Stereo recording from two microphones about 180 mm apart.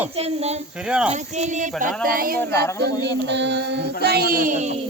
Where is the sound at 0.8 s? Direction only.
5° right (ahead or behind).